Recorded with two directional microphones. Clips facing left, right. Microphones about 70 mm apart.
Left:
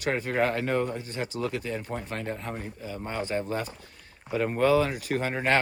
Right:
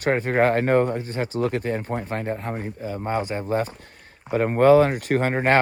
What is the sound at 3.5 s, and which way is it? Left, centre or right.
Speech, right.